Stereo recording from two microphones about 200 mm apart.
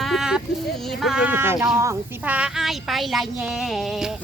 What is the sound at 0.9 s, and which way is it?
Speech, centre (ahead or behind).